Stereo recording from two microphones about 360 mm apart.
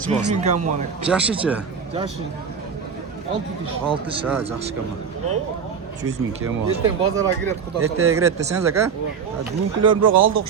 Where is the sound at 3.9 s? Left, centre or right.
Centre.